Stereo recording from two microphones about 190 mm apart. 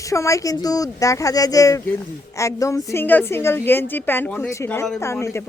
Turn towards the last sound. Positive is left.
turn(degrees=15)  # may be behind; listen again after turning